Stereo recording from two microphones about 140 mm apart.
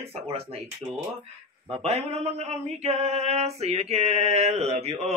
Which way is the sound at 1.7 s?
50° right (ahead or behind).